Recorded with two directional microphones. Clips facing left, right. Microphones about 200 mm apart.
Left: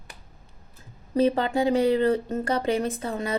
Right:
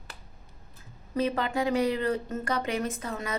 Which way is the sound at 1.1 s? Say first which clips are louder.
Left 6 dB; 30° left (ahead or behind).